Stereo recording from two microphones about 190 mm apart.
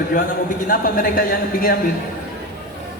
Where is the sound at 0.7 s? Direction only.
50° left (ahead or behind).